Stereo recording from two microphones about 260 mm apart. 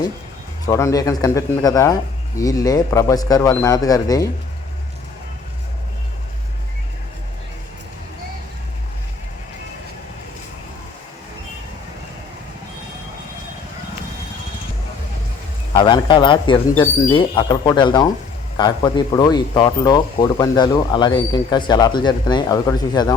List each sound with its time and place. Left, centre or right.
0.7 s speech: centre
15.7 s speech: centre